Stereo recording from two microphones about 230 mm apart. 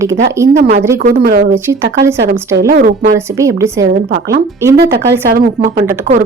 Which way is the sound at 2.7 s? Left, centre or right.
Right.